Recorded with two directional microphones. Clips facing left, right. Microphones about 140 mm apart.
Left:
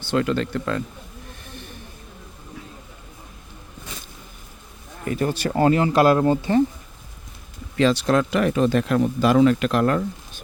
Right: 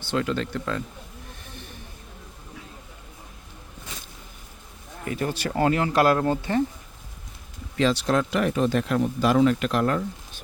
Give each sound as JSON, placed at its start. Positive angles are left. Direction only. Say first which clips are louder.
{"t": 0.1, "sound": "speech", "louder": "left 4 dB", "side_deg": 60}
{"t": 5.0, "sound": "speech", "louder": "left 4 dB", "side_deg": 40}
{"t": 8.0, "sound": "speech", "louder": "left 3 dB", "side_deg": 85}